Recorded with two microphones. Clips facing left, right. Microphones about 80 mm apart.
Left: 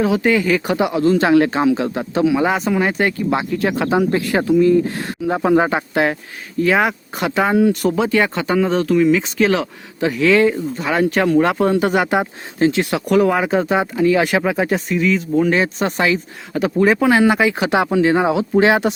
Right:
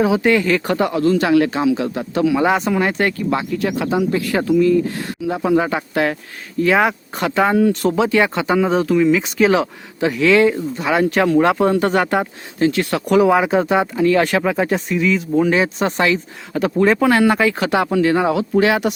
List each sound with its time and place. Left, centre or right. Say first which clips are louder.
0.0 s speech: right 1 dB; centre
0.3 s speech: even; centre
1.1 s speech: left 1 dB; left
2.4 s speech: right 1 dB; centre
3.2 s speech: left 1 dB; left
3.5 s speech: left 1 dB; left
4.3 s speech: left 1 dB; left
6.6 s speech: right 1 dB; centre
12.5 s speech: left 1 dB; left
13.1 s speech: right 2 dB; centre; by 18.9 s left